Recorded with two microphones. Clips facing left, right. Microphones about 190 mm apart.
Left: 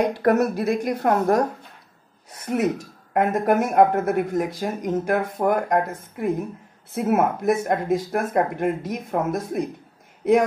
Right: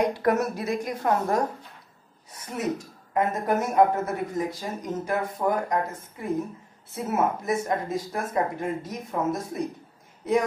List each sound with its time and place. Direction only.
0.2 s speech: 60° left (ahead or behind)
2.4 s speech: 60° left (ahead or behind)